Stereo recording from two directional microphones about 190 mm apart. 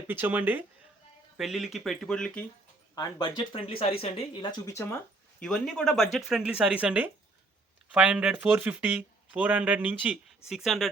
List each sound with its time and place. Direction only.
0.1 s speech: 10° right (ahead or behind); by 2.5 s 5° left (ahead or behind)
2.9 s speech: 20° left (ahead or behind)
5.4 s speech: 5° left (ahead or behind)